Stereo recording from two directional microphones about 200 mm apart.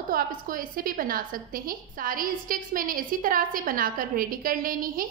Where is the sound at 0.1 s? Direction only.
45° right (ahead or behind).